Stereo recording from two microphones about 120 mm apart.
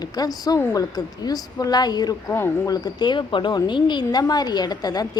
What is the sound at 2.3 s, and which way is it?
Speech, 20° left (ahead or behind).